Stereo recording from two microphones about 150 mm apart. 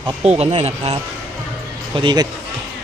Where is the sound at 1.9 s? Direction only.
30° right (ahead or behind).